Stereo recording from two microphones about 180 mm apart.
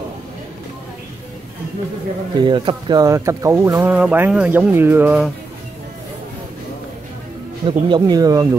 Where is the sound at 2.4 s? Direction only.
25° right (ahead or behind); by 5.2 s 10° right (ahead or behind).